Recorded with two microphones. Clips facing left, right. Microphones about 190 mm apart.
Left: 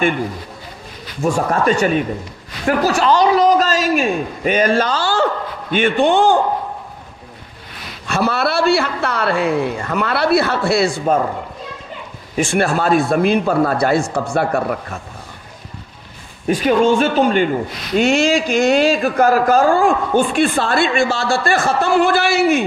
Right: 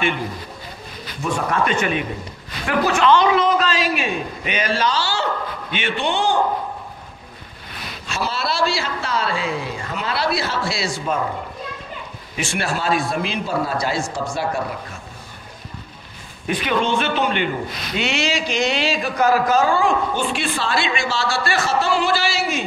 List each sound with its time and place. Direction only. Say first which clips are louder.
1.2 s a man's voice: left 5 dB; 45° left (ahead or behind)
8.1 s a man's voice: left 7 dB; 60° left (ahead or behind)
12.4 s a man's voice: left 8 dB; 50° left (ahead or behind)
16.4 s a man's voice: left 7 dB; 40° left (ahead or behind); by 22.6 s 60° left (ahead or behind)